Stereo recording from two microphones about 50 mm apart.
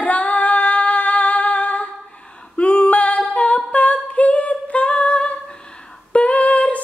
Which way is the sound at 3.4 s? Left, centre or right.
Left.